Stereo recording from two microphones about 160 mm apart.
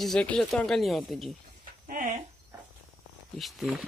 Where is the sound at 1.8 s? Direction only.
55° right (ahead or behind).